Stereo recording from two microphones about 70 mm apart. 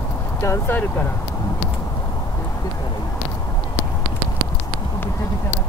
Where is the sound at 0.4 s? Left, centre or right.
Left.